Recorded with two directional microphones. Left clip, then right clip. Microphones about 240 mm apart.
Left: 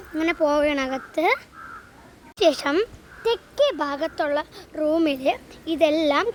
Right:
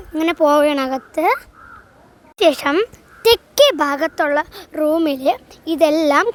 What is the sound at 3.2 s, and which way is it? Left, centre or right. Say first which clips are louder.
Speech: right 9 dB; right.